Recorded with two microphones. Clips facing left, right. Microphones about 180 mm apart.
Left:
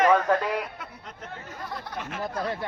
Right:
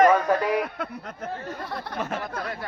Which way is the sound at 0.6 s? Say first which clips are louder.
Right 6 dB; 60° right (ahead or behind).